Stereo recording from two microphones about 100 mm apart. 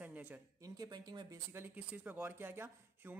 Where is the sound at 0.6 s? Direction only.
40° right (ahead or behind).